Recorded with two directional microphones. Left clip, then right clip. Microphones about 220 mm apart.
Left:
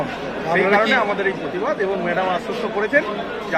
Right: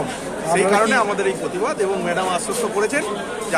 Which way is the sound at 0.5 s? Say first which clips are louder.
Even; 30° right (ahead or behind).